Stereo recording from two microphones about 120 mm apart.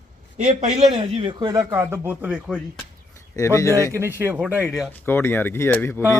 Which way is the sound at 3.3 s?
25° left (ahead or behind).